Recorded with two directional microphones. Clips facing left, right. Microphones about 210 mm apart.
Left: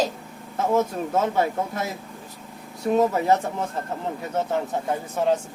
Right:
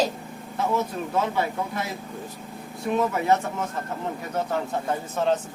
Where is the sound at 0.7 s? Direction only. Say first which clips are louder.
Left 5 dB; 45° left (ahead or behind).